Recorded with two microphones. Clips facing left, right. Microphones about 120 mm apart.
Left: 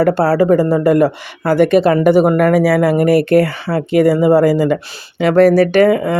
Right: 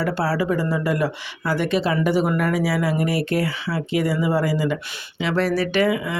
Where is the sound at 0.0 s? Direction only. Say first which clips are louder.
Left 10 dB; 50° left (ahead or behind).